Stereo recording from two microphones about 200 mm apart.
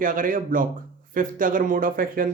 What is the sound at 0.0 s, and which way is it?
Speech, 45° right (ahead or behind).